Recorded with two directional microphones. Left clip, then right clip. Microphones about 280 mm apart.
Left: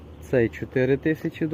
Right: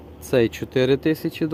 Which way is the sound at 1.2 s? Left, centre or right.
Right.